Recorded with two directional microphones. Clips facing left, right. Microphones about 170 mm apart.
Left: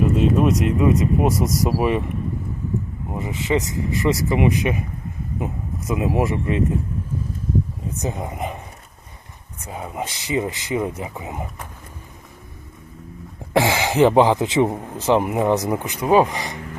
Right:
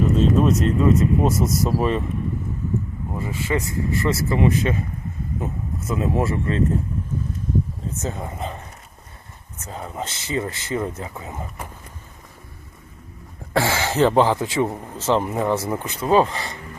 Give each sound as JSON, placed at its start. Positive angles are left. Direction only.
{"t": 0.2, "sound": "speech", "side_deg": 15}
{"t": 3.1, "sound": "speech", "side_deg": 20}
{"t": 7.9, "sound": "speech", "side_deg": 15}
{"t": 13.5, "sound": "speech", "side_deg": 15}